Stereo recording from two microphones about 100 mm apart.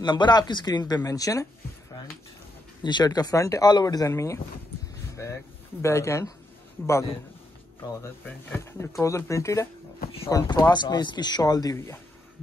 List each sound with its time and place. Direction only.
0.0 s speech: 50° left (ahead or behind); by 1.5 s 35° left (ahead or behind)
2.8 s speech: 45° left (ahead or behind); by 6.3 s 30° left (ahead or behind)
7.9 s speech: 25° left (ahead or behind)
10.5 s speech: 45° left (ahead or behind)
11.7 s speech: 25° left (ahead or behind)